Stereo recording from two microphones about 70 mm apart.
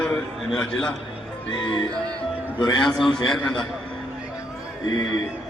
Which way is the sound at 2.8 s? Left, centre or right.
Centre.